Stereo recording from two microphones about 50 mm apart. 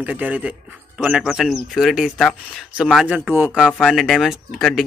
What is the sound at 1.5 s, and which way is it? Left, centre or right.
Speech, centre.